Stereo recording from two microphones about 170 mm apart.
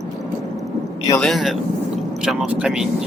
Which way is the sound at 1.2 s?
Centre (ahead or behind).